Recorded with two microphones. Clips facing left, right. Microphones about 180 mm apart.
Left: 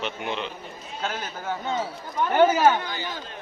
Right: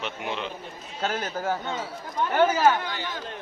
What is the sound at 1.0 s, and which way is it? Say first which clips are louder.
Speech: right 4 dB; 40° right (ahead or behind).